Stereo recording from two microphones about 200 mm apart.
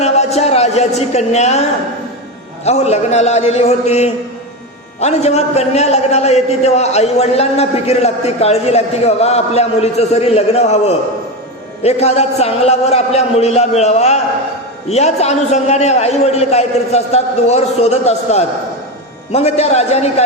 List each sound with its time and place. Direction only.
0.0 s speech: 30° left (ahead or behind)
2.6 s a man's voice: 35° left (ahead or behind)